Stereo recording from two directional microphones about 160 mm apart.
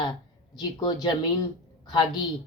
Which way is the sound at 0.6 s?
25° left (ahead or behind).